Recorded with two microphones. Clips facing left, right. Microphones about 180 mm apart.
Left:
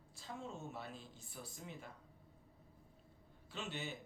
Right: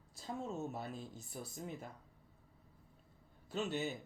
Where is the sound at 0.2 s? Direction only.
40° right (ahead or behind).